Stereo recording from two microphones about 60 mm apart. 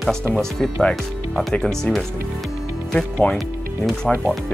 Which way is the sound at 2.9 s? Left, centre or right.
Centre.